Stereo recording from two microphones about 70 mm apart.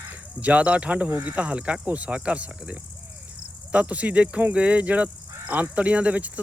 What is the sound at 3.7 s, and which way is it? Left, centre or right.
Cricket, centre.